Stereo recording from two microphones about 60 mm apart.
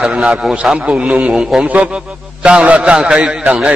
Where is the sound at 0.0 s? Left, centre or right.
Centre.